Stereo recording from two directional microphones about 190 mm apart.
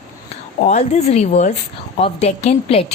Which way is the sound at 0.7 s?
35° left (ahead or behind).